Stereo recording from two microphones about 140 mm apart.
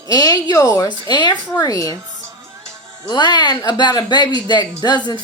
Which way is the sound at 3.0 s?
30° left (ahead or behind).